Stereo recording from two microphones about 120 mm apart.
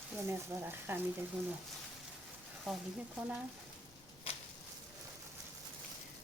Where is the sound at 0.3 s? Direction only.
20° right (ahead or behind).